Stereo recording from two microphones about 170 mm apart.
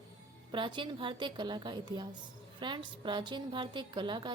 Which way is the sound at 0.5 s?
30° right (ahead or behind).